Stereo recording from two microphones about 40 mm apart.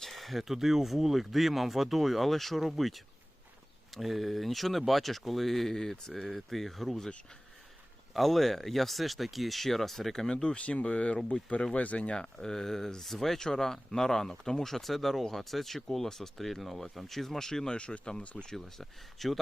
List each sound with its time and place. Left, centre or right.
0.0 s speech: centre
8.1 s speech: centre
10.3 s speech: left
12.1 s speech: centre
17.7 s speech: left
18.5 s speech: centre